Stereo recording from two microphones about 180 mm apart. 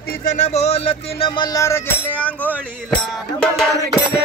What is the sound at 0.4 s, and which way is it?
Music, 35° left (ahead or behind).